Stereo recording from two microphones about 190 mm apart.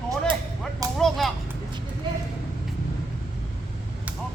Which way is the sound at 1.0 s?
Centre (ahead or behind).